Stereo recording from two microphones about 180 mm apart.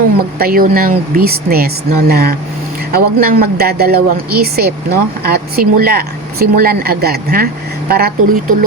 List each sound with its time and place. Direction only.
0.3 s speech: 55° right (ahead or behind)